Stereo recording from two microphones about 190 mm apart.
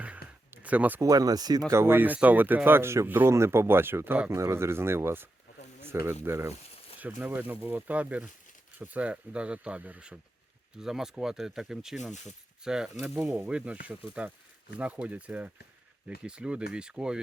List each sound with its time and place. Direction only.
0.5 s speech: 10° right (ahead or behind)